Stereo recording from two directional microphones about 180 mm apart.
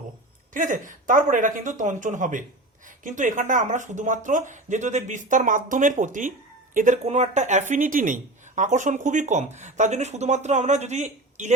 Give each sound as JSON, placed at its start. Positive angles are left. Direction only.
{"t": 0.5, "sound": "speech", "side_deg": -45}